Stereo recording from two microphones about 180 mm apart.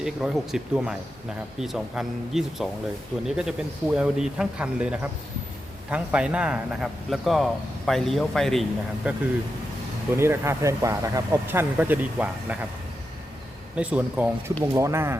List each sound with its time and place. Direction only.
0.0 s speech: 5° right (ahead or behind)
13.7 s speech: 10° right (ahead or behind)